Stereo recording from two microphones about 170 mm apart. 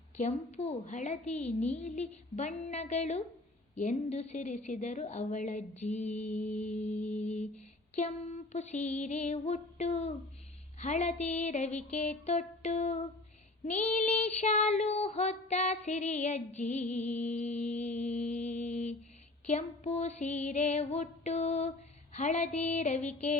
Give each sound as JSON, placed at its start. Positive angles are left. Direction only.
{"t": 0.2, "sound": "child singing", "side_deg": 40}
{"t": 6.1, "sound": "mantra", "side_deg": 10}
{"t": 7.9, "sound": "a sound", "side_deg": 40}
{"t": 10.8, "sound": "child singing", "side_deg": 45}
{"t": 11.9, "sound": "a sound", "side_deg": 45}
{"t": 13.7, "sound": "child singing", "side_deg": 45}
{"t": 18.3, "sound": "music", "side_deg": 45}
{"t": 19.5, "sound": "child singing", "side_deg": 45}